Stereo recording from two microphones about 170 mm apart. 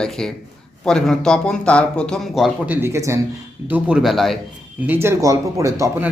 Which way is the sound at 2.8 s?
15° right (ahead or behind).